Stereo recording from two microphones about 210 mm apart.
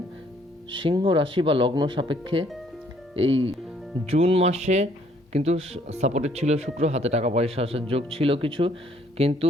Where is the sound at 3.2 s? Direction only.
65° right (ahead or behind).